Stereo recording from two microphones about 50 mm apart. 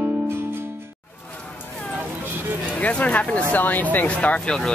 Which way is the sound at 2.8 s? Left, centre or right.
Left.